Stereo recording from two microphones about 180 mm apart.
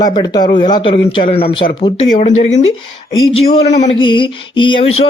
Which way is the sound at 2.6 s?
90° left.